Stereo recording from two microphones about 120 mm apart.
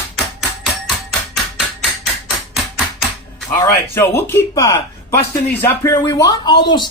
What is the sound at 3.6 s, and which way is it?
Speech, 20° left (ahead or behind).